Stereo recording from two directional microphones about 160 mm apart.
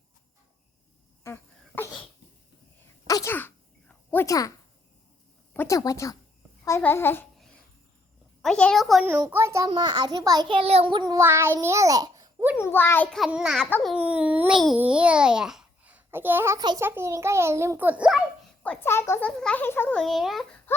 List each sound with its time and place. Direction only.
1.2 s a sound: 15° left (ahead or behind)
3.1 s a sound: 20° left (ahead or behind)
5.5 s a child's voice: 20° left (ahead or behind)
7.3 s babbling: 5° left (ahead or behind)
8.4 s a child's voice: 5° left (ahead or behind)
9.0 s a child's voice: 10° right (ahead or behind)
10.6 s a child's voice: 40° right (ahead or behind); by 12.5 s 15° right (ahead or behind)
12.5 s a child's voice: 15° left (ahead or behind); by 16.6 s 15° right (ahead or behind)
16.6 s a child's voice: 25° right (ahead or behind)
16.8 s a child's voice: 15° right (ahead or behind)
18.6 s a child's voice: 10° left (ahead or behind)